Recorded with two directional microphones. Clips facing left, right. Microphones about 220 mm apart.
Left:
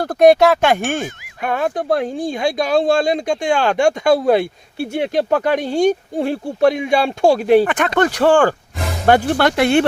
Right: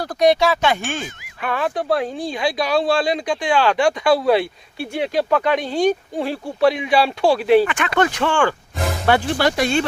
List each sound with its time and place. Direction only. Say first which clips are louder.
0.0 s speech: left 5 dB; 55° left (ahead or behind)